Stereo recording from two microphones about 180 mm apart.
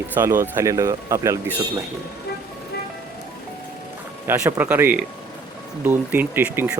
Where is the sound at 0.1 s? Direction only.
10° right (ahead or behind).